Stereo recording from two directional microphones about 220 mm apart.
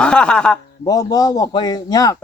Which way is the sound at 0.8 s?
15° left (ahead or behind).